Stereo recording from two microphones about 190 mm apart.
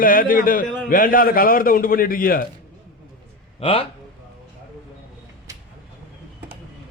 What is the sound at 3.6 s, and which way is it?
Speech, 30° left (ahead or behind).